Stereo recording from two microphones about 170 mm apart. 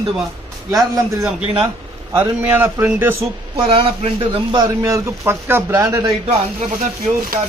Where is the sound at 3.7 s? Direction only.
30° right (ahead or behind).